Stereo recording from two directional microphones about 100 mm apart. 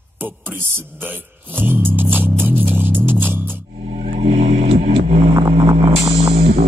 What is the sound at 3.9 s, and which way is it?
Music, 85° right.